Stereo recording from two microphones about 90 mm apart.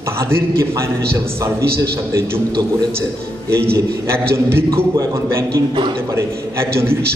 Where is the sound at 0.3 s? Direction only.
30° right (ahead or behind).